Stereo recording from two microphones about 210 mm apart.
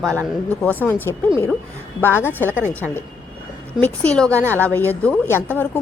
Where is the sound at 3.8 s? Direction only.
5° left (ahead or behind).